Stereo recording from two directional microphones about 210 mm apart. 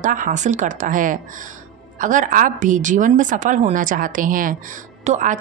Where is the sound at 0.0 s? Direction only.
40° right (ahead or behind).